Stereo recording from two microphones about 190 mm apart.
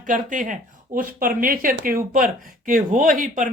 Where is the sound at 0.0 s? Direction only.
40° right (ahead or behind).